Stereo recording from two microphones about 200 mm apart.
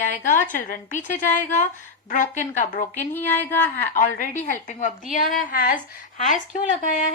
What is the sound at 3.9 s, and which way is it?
A woman's voice, 40° left (ahead or behind).